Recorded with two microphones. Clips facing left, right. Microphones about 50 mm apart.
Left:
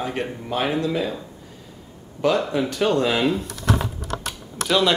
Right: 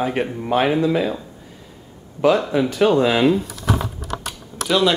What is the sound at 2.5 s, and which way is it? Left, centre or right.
Speech, centre.